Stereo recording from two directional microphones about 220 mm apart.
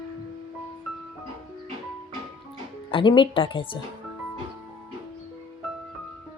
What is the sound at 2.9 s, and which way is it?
Speech, 20° left (ahead or behind).